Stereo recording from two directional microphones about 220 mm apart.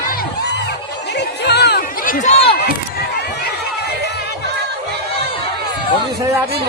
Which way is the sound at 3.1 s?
50° left (ahead or behind).